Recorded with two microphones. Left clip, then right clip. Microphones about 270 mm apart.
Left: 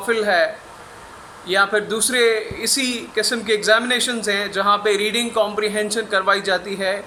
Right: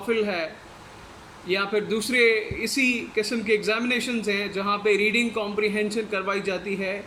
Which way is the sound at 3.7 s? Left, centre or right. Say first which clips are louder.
Left 9 dB; left.